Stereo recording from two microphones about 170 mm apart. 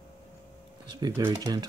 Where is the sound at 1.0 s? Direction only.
25° right (ahead or behind).